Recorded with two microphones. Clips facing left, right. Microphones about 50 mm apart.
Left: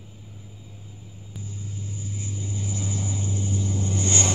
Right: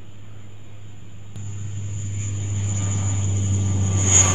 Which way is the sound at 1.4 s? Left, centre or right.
Right.